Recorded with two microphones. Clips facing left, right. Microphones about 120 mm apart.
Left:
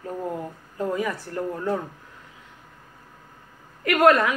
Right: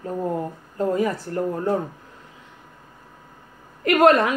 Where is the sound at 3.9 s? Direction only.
30° right (ahead or behind).